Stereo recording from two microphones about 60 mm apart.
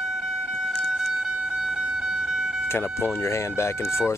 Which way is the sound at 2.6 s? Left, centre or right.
Left.